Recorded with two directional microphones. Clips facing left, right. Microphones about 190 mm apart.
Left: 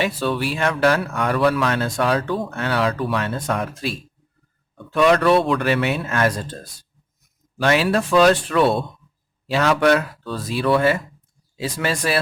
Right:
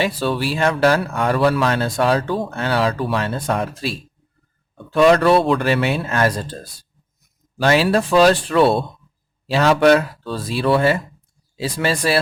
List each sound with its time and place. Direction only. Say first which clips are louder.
0.0 s speech: right 1 dB; 30° right (ahead or behind)